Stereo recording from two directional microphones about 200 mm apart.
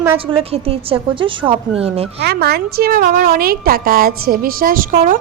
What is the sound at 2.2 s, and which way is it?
A woman's voice, 50° right (ahead or behind).